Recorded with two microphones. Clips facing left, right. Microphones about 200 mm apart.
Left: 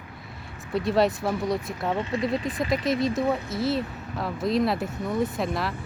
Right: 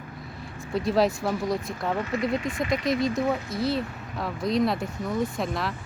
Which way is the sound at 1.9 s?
25° left (ahead or behind).